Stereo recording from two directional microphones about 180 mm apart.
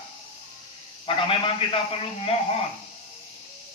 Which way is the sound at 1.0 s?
30° left (ahead or behind).